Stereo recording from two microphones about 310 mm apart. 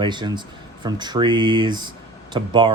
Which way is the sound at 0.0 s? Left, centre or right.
Centre.